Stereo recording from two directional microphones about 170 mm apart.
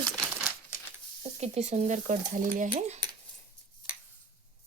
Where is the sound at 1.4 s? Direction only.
40° right (ahead or behind).